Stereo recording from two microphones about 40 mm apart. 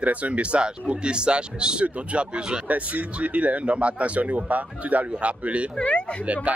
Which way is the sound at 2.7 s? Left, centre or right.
Right.